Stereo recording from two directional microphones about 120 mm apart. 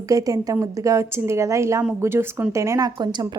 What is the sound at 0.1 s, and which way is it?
A woman's voice, 30° right (ahead or behind).